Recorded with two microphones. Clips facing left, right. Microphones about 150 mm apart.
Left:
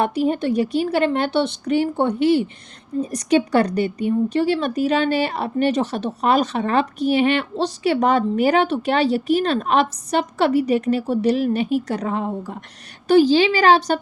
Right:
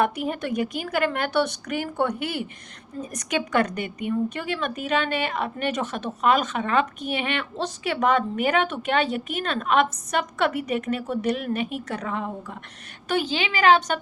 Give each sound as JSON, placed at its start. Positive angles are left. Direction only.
{"t": 0.0, "sound": "a woman's voice", "side_deg": 30}